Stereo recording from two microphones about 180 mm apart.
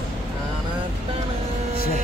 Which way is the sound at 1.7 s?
55° left (ahead or behind).